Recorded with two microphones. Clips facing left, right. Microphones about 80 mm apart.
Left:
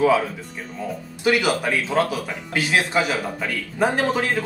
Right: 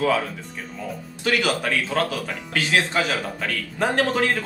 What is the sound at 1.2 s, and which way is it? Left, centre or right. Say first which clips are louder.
Speech: left 3 dB; centre.